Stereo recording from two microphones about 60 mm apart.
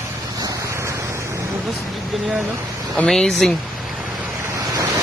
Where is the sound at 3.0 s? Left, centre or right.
Centre.